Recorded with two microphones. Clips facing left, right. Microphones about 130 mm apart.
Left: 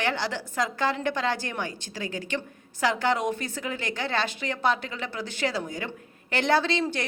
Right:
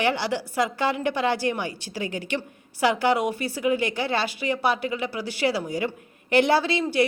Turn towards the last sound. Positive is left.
turn(degrees=-5)  # may be behind; listen again after turning